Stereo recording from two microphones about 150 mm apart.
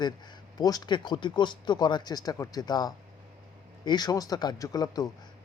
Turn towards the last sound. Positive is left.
turn(degrees=25)  # may be behind; listen again after turning